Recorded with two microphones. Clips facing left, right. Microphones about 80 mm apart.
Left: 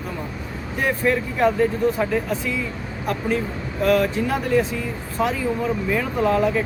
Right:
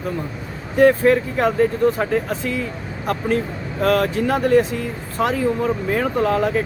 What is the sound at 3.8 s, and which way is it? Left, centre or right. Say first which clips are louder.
Speech: right 1 dB; right.